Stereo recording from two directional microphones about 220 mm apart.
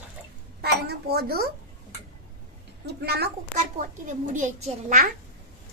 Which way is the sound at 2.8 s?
45° right (ahead or behind).